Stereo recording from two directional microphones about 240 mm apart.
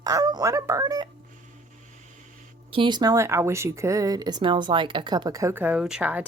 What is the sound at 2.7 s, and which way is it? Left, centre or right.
Speech, centre.